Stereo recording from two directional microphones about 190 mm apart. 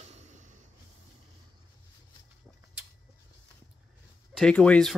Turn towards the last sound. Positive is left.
turn(degrees=5)  # may be behind; listen again after turning